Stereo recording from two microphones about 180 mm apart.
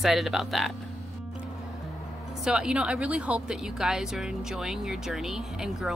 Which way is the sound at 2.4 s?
5° right (ahead or behind).